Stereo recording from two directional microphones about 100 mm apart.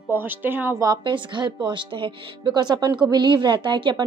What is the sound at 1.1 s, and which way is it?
A woman's voice, 55° right (ahead or behind).